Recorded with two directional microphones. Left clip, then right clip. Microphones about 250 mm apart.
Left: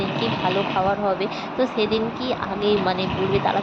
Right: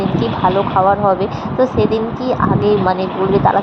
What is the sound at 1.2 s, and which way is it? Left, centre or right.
Speech, centre.